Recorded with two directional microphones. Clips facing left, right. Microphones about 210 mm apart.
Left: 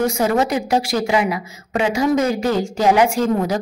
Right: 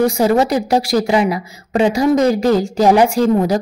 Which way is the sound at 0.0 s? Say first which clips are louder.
Right 4 dB; 35° right (ahead or behind).